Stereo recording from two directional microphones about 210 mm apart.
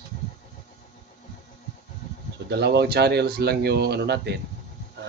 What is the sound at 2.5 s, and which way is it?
Speech, 50° right (ahead or behind).